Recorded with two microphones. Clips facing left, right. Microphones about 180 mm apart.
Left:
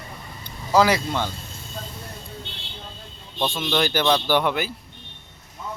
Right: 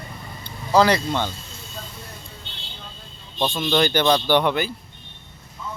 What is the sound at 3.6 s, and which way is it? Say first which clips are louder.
Speech: right 3 dB; 5° left (ahead or behind).